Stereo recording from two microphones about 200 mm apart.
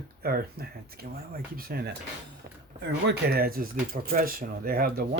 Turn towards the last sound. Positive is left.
turn(degrees=-50)  # may be behind; listen again after turning